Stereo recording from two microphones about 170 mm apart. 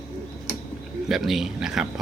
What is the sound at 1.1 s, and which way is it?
Speech, centre (ahead or behind).